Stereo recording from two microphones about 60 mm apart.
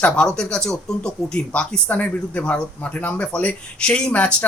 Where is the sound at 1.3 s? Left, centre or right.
Left.